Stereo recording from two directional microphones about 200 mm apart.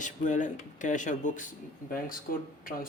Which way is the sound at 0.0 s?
40° left (ahead or behind).